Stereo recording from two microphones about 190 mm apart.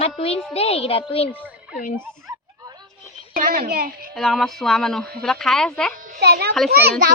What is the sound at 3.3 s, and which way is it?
Speech, 50° right (ahead or behind).